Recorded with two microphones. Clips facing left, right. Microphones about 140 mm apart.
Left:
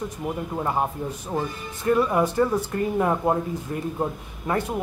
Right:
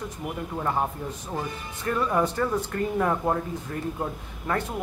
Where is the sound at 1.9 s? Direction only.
15° left (ahead or behind).